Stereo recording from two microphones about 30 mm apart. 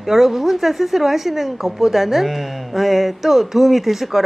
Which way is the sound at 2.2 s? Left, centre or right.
Centre.